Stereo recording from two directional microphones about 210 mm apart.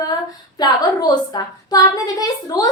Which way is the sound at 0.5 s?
20° left (ahead or behind).